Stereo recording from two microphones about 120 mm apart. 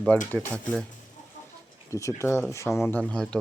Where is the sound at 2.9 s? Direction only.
10° left (ahead or behind).